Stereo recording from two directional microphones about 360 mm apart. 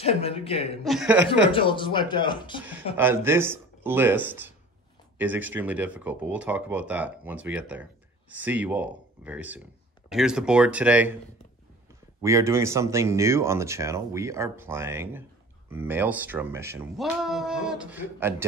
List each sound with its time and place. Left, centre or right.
0.0 s speech: centre
0.8 s speech: centre
1.5 s speech: centre
3.0 s speech: centre
12.2 s speech: centre